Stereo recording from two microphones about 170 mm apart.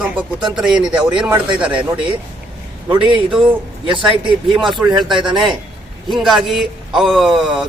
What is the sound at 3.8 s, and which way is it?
Speech, 30° right (ahead or behind).